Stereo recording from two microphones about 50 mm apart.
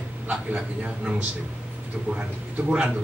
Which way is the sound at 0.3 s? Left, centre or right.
Right.